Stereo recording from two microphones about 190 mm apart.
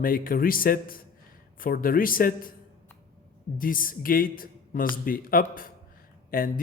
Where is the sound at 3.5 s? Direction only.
45° left (ahead or behind).